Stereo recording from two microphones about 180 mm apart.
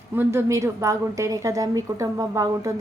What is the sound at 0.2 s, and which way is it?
A woman's voice, 15° right (ahead or behind).